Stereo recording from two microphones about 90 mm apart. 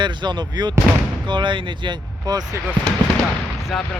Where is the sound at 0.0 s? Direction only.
60° right (ahead or behind).